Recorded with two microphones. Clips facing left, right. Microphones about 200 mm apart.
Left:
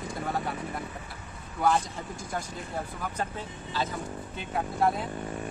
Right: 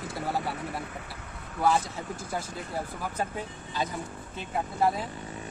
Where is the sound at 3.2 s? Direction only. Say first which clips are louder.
Right 3 dB; 15° right (ahead or behind).